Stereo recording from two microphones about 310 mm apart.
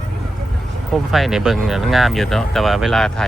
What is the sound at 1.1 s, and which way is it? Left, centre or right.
Speech, centre.